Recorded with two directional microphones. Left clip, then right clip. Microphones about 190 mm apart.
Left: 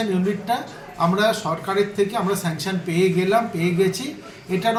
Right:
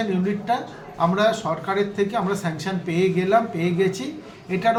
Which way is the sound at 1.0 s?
Centre (ahead or behind).